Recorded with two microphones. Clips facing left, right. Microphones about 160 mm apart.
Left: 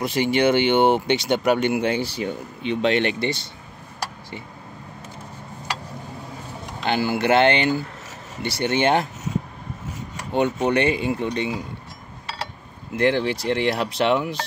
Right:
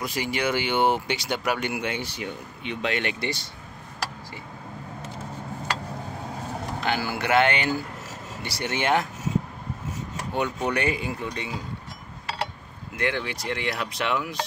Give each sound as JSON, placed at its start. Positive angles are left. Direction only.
{"t": 0.0, "sound": "speech", "side_deg": 25}
{"t": 6.9, "sound": "speech", "side_deg": 25}
{"t": 10.3, "sound": "speech", "side_deg": 25}
{"t": 12.9, "sound": "speech", "side_deg": 30}